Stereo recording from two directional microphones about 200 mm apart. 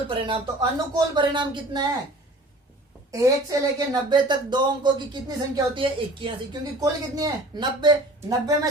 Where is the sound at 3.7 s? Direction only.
20° right (ahead or behind).